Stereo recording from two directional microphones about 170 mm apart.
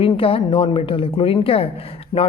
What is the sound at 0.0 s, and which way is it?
A woman's voice, 30° left (ahead or behind).